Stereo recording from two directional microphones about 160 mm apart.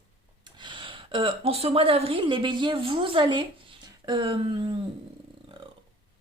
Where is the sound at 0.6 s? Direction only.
30° right (ahead or behind).